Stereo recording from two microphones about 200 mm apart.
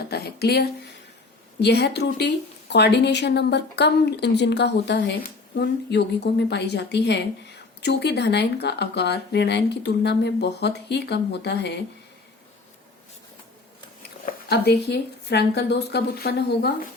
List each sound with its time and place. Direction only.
0.0 s a woman's voice: 50° left (ahead or behind)
14.3 s a woman's voice: 55° left (ahead or behind)